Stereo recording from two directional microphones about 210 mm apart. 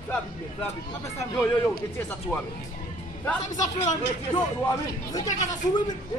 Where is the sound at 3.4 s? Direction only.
35° left (ahead or behind).